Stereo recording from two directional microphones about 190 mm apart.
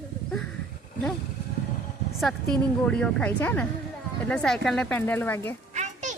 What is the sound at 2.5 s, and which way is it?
Speech, 5° left (ahead or behind).